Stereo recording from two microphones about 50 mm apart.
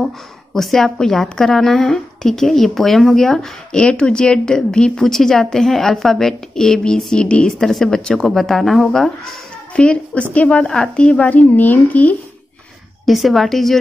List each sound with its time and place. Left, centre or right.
0.6 s a woman's voice: centre
3.7 s a woman's voice: centre
7.4 s a woman's voice: centre
9.8 s a woman's voice: left
13.0 s speech: centre